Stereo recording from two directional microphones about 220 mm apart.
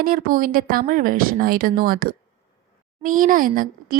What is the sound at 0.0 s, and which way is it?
Speech, 40° right (ahead or behind).